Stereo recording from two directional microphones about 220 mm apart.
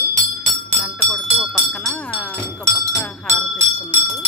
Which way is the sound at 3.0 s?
10° left (ahead or behind).